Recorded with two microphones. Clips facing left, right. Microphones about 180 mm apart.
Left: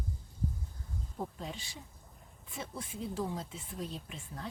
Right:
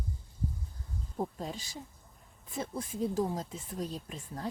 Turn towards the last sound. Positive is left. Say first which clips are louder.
# right 3 dB
turn(degrees=-40)  # may be behind; listen again after turning